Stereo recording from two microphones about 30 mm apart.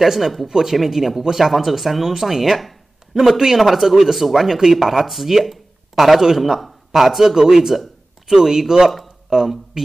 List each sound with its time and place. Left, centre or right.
0.0 s speech: centre
5.4 s a sound: centre
6.3 s speech: centre